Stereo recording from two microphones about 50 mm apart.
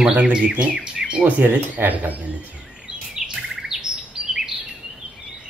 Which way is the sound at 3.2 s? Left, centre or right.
Centre.